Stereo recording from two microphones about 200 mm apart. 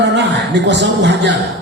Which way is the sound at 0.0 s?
60° right (ahead or behind).